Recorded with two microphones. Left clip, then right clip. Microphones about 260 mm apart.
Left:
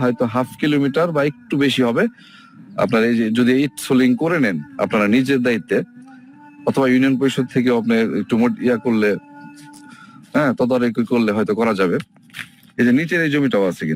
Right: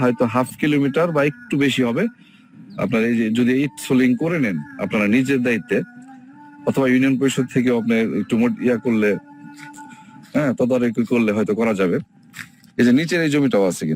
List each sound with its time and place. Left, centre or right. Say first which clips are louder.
0.0 s speech: right 1 dB; centre
1.5 s speech: left 3 dB; centre
10.3 s speech: left 2 dB; centre
12.4 s speech: even; centre